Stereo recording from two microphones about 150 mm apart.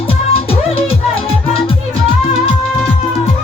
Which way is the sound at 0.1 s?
40° left (ahead or behind).